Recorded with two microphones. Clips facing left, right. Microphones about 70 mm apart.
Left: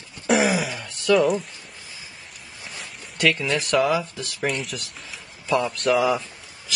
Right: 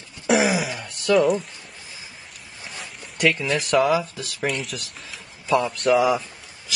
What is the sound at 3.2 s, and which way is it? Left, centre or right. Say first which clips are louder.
Speech: right 1 dB; centre.